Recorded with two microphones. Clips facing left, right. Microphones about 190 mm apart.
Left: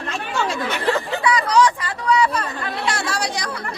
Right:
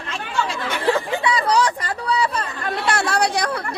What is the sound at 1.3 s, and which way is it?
Chatter, 35° right (ahead or behind).